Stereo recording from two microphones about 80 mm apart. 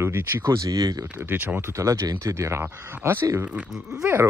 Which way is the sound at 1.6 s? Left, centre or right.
Right.